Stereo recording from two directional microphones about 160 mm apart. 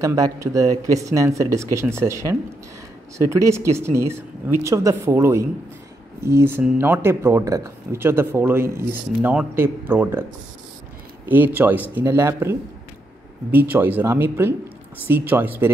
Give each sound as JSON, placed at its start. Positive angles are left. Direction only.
{"t": 0.0, "sound": "speech", "side_deg": -20}
{"t": 11.2, "sound": "speech", "side_deg": -10}